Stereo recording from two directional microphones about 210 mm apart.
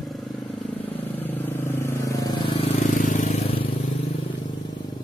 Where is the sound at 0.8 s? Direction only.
10° left (ahead or behind); by 3.6 s 30° left (ahead or behind).